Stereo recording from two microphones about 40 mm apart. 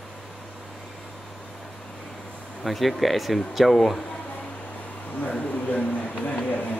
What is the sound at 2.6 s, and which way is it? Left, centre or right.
Speech, centre.